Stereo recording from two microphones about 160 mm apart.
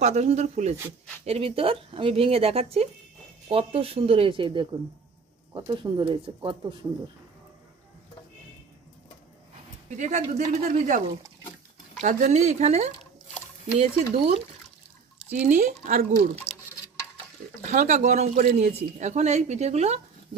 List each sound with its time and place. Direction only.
0.0 s speech: 45° right (ahead or behind)
9.8 s speech: 50° right (ahead or behind)
12.0 s speech: 50° right (ahead or behind)
15.3 s speech: 50° right (ahead or behind)
16.5 s a sound: 90° left
17.6 s speech: 50° right (ahead or behind)